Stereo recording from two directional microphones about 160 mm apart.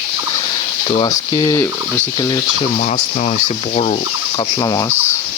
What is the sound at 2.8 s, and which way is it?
Speech, 45° left (ahead or behind).